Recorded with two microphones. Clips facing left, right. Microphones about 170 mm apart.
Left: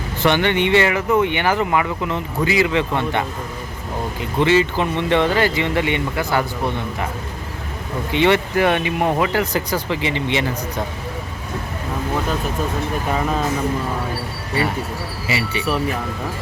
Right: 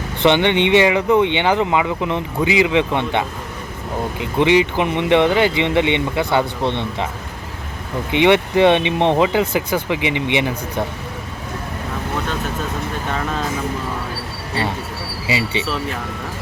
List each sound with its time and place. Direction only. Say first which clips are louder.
0.3 s speech: right 2 dB; 20° right (ahead or behind)
8.1 s speech: right 3 dB; 20° right (ahead or behind)
9.5 s speech: right 2 dB; 10° right (ahead or behind)
15.3 s speech: right 2 dB; 20° right (ahead or behind)